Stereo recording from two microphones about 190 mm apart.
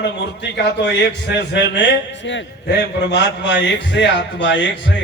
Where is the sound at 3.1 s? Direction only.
65° left (ahead or behind).